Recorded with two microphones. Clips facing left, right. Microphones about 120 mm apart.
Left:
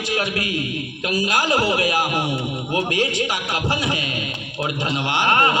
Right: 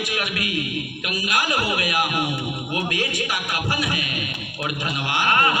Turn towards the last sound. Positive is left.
turn(degrees=25)  # may be behind; listen again after turning